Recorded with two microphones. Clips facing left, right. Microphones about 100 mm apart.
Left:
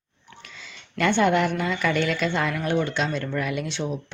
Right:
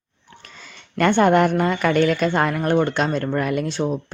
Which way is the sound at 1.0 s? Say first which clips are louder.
Right 5 dB; 45° right (ahead or behind).